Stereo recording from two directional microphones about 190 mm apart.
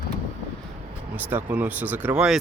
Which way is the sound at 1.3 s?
10° right (ahead or behind).